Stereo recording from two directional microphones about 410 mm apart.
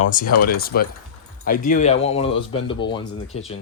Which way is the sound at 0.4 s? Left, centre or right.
Left.